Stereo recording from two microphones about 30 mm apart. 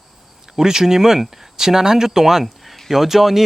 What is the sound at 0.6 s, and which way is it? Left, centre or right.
Speech, centre.